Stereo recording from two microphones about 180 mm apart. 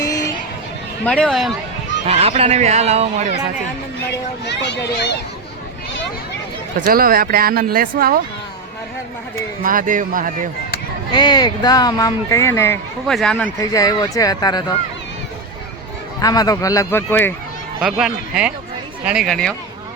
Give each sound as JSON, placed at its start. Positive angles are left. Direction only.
{"t": 1.0, "sound": "speech", "side_deg": 5}
{"t": 2.0, "sound": "speech", "side_deg": -35}
{"t": 4.4, "sound": "speech", "side_deg": 70}
{"t": 6.7, "sound": "speech", "side_deg": -55}
{"t": 9.6, "sound": "a man's voice", "side_deg": -50}
{"t": 11.1, "sound": "speech", "side_deg": 25}
{"t": 13.1, "sound": "speech", "side_deg": 5}
{"t": 16.2, "sound": "speech", "side_deg": 20}
{"t": 17.7, "sound": "speech", "side_deg": -5}